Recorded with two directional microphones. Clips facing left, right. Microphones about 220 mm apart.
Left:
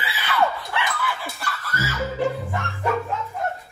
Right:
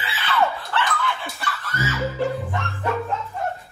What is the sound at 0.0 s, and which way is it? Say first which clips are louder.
Screaming: even; 10° left (ahead or behind).